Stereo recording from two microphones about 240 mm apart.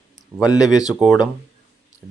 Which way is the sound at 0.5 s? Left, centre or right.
Centre.